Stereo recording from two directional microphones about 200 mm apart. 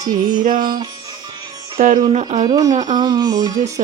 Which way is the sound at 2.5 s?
20° right (ahead or behind).